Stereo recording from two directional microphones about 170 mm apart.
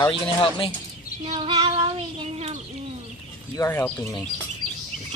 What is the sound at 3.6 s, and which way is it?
Speech, 15° left (ahead or behind).